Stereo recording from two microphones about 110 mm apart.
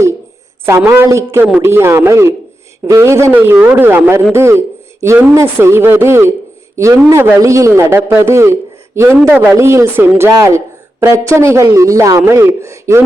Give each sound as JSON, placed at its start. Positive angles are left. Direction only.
{"t": 0.9, "sound": "a man's voice", "side_deg": -25}